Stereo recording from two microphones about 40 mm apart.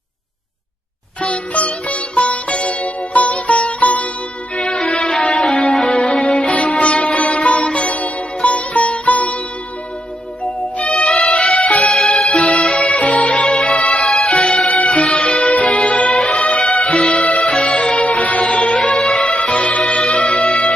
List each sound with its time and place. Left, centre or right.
1.2 s music: left; by 5.9 s centre
5.9 s music: left
10.8 s music: left
11.9 s music: centre
12.7 s music: left
14.0 s music: centre
17.0 s music: centre
17.2 s music: left
18.8 s music: centre
19.2 s music: left